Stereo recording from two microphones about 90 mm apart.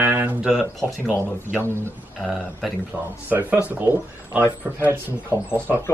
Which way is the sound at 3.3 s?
20° right (ahead or behind).